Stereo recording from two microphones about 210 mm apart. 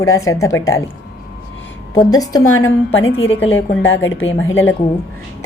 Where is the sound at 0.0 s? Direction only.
15° left (ahead or behind).